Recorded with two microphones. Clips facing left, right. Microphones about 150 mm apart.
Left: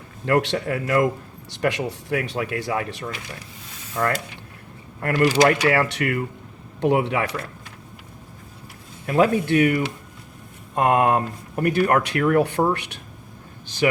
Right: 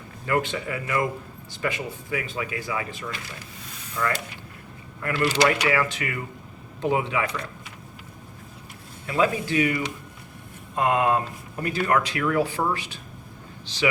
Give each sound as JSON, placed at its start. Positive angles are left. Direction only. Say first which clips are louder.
{"t": 0.3, "sound": "a man's voice", "louder": "left 5 dB", "side_deg": 75}
{"t": 4.0, "sound": "speech", "louder": "left 4 dB", "side_deg": 45}
{"t": 9.0, "sound": "a man's voice", "louder": "left 5 dB", "side_deg": 60}
{"t": 13.7, "sound": "a man's voice", "louder": "left 4 dB", "side_deg": 50}